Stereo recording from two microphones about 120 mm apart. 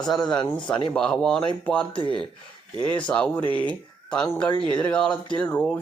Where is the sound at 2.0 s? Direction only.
40° right (ahead or behind).